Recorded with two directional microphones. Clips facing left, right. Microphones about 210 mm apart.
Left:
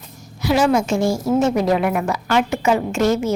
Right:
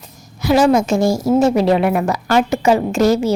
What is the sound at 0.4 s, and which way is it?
A woman's voice, 40° right (ahead or behind).